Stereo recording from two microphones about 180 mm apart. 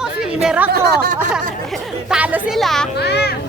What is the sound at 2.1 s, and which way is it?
Speech, 5° right (ahead or behind).